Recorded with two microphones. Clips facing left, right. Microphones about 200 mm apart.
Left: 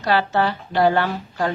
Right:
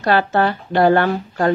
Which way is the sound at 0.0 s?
55° right (ahead or behind).